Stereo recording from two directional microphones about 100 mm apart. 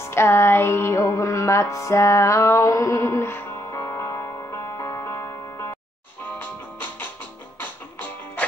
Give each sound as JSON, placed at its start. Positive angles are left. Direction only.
{"t": 0.1, "sound": "music", "side_deg": 25}
{"t": 4.7, "sound": "music", "side_deg": 35}
{"t": 6.3, "sound": "music", "side_deg": 20}